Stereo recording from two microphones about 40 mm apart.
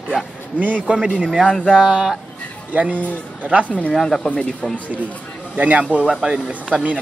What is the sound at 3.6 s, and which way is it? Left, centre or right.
Speech, left.